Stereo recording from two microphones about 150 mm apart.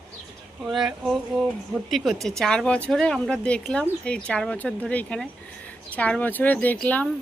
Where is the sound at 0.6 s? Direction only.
Centre (ahead or behind).